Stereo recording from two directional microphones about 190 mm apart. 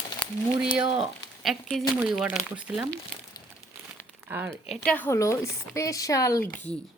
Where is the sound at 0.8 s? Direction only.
25° right (ahead or behind).